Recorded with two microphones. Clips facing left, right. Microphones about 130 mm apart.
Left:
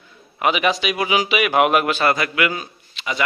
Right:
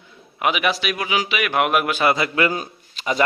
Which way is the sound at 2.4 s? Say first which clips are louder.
Right 1 dB; 40° right (ahead or behind).